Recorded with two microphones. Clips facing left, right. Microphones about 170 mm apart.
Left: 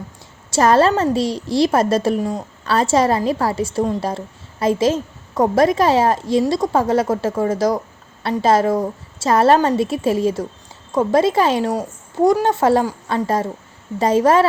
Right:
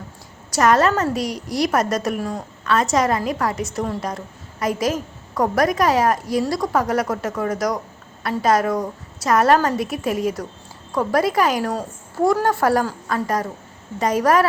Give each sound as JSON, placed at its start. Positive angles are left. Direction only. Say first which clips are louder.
{"t": 0.5, "sound": "a woman's voice", "louder": "left 3 dB", "side_deg": 30}
{"t": 11.7, "sound": "a woman's voice", "louder": "left 4 dB", "side_deg": 15}